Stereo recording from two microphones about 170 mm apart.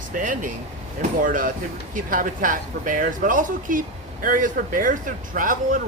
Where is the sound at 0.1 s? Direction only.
50° right (ahead or behind).